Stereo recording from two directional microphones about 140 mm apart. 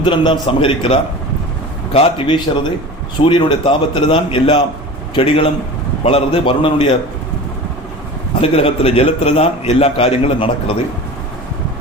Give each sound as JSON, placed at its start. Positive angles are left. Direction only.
{"t": 0.0, "sound": "a man's voice", "side_deg": 35}
{"t": 8.4, "sound": "a man's voice", "side_deg": 45}